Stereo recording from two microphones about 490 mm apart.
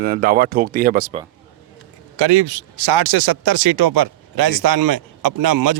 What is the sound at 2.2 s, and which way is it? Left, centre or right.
Speech, right.